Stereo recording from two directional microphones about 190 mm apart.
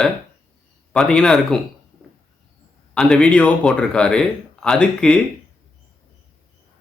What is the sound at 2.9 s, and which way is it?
Speech, 5° left (ahead or behind).